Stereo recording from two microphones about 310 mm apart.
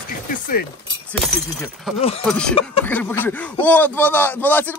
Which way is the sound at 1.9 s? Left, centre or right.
Centre.